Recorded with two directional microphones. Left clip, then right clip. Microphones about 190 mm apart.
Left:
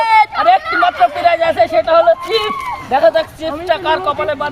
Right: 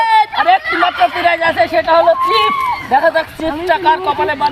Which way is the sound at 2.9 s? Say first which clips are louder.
Left 2 dB; 35° left (ahead or behind).